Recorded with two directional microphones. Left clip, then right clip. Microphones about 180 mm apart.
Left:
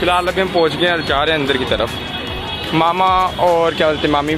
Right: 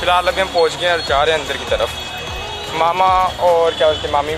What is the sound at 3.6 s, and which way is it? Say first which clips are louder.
Speech: even; 15° left (ahead or behind).